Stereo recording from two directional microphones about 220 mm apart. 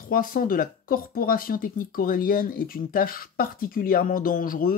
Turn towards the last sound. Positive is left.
turn(degrees=40)  # may be behind; listen again after turning